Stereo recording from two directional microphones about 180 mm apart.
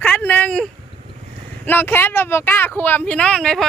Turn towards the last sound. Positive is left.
turn(degrees=5)  # may be behind; listen again after turning